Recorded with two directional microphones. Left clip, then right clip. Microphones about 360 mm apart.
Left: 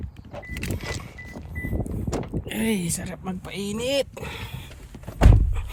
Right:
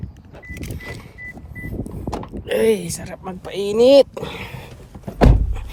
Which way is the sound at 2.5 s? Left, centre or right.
Centre.